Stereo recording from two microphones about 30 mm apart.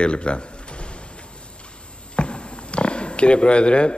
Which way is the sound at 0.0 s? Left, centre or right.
Left.